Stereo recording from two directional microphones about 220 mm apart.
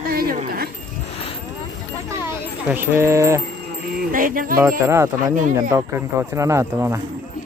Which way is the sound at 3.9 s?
40° right (ahead or behind).